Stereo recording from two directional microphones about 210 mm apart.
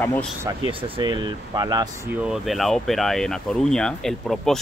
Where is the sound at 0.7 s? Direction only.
20° right (ahead or behind).